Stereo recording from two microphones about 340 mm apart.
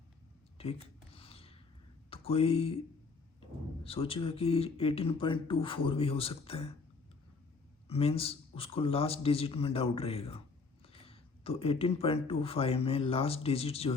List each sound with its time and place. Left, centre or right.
0.6 s speech: centre
1.1 s a sound: centre
2.0 s speech: centre
3.8 s speech: centre
7.9 s speech: centre